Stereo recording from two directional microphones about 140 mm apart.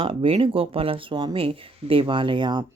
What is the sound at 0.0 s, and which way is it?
Speech, 40° right (ahead or behind).